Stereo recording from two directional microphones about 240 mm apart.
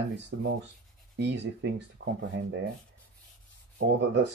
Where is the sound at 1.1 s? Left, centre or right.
Right.